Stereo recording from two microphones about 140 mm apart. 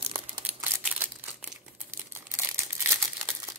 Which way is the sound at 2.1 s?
15° right (ahead or behind).